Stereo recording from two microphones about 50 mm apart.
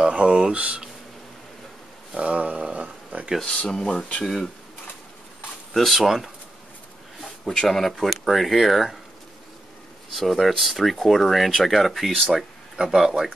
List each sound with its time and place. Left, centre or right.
0.0 s speech: right
2.1 s a sound: right
3.4 s speech: centre
5.7 s speech: centre
7.2 s speech: centre
10.1 s speech: centre
12.7 s speech: centre